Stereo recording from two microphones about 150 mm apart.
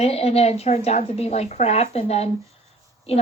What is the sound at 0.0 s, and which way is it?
A woman's voice, 45° left (ahead or behind).